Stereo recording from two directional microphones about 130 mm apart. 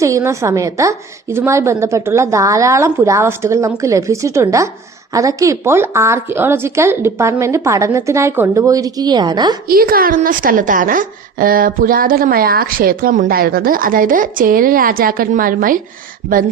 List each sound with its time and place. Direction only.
0.0 s a woman's voice: 25° right (ahead or behind)
9.8 s a woman's voice: 90° right
16.2 s speech: 70° right (ahead or behind)